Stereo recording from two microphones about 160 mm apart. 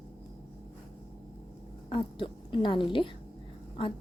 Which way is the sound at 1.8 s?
30° left (ahead or behind).